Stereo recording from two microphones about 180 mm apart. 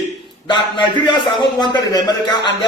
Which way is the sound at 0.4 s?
25° left (ahead or behind).